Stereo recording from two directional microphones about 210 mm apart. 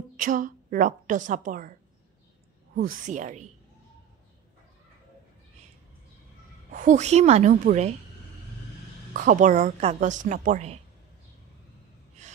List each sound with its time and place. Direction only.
0.2 s a woman's voice: 40° right (ahead or behind)
6.7 s a woman's voice: 35° right (ahead or behind)
9.1 s a woman's voice: 40° right (ahead or behind)